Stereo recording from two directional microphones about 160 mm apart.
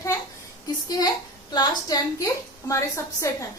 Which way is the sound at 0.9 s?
25° left (ahead or behind).